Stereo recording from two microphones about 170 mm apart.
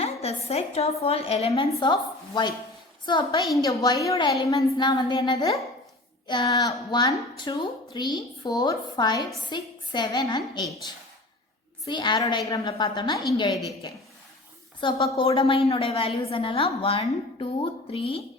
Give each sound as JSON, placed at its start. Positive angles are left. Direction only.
{"t": 0.0, "sound": "a woman's voice", "side_deg": 35}
{"t": 11.9, "sound": "a woman's voice", "side_deg": 25}
{"t": 14.8, "sound": "a woman's voice", "side_deg": 30}